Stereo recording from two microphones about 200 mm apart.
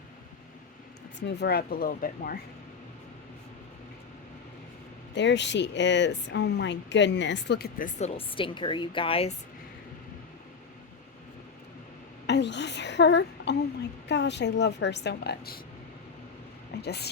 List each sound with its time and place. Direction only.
1.2 s speech: 55° left (ahead or behind)
5.1 s speech: 60° left (ahead or behind); by 9.3 s 30° left (ahead or behind)
12.2 s speech: 60° left (ahead or behind)
16.8 s speech: 55° left (ahead or behind)